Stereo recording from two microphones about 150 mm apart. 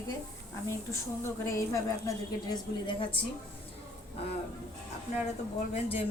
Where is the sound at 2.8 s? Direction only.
35° left (ahead or behind).